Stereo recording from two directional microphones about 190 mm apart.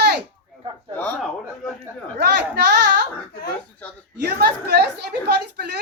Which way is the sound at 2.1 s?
65° right (ahead or behind).